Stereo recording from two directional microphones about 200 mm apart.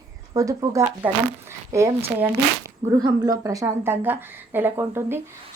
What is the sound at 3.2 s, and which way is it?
A woman's voice, 20° right (ahead or behind).